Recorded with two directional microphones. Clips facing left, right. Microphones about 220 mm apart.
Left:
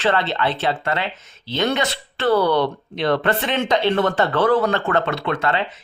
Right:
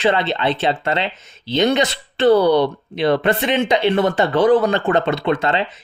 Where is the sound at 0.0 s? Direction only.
15° right (ahead or behind).